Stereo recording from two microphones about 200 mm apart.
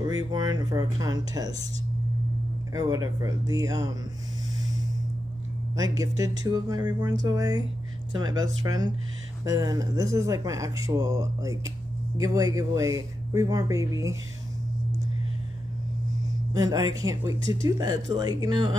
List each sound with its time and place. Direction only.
0.0 s speech: 20° right (ahead or behind)
2.7 s speech: 20° right (ahead or behind)
5.8 s speech: 15° right (ahead or behind)
16.5 s speech: 20° right (ahead or behind)